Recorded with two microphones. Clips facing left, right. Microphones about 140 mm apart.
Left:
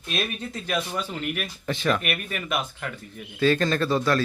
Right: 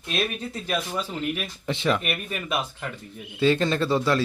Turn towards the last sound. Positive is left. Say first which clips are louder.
# even
turn(degrees=-20)  # may be behind; listen again after turning